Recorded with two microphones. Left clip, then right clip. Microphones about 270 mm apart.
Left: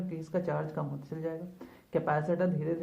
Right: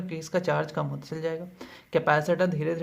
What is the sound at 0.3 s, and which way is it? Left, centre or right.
Speech, right.